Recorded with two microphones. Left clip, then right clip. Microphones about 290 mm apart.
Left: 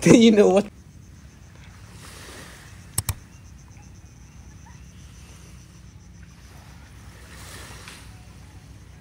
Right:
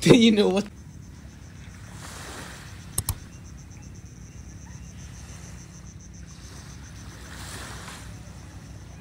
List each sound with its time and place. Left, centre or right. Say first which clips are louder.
0.0 s a woman's voice: left 3 dB; centre
0.5 s speech: left 6 dB; centre